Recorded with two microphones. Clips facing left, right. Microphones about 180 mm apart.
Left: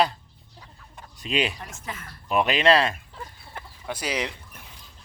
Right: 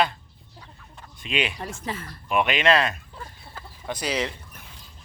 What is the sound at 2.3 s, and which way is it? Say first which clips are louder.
Speech: left 1 dB; 35° left (ahead or behind).